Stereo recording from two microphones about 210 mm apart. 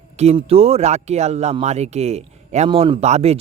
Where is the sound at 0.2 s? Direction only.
30° right (ahead or behind).